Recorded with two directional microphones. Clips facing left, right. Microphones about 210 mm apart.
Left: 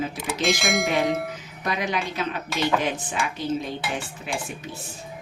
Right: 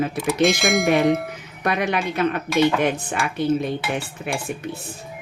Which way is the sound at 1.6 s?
60° right (ahead or behind).